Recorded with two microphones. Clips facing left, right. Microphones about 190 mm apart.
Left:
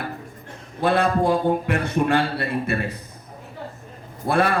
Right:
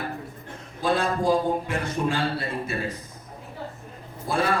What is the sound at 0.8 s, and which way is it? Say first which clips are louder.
A man's voice: left 5 dB; 60° left (ahead or behind).